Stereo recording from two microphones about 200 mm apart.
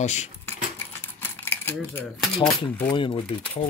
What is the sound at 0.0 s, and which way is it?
Speech, 35° left (ahead or behind).